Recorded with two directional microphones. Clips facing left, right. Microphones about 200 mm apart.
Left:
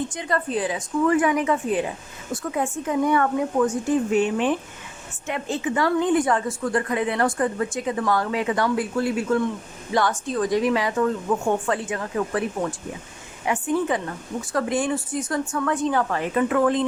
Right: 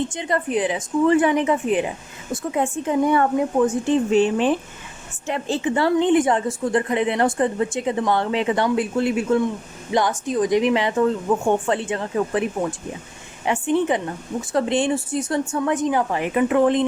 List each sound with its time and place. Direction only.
0.1 s a woman's voice: 20° right (ahead or behind)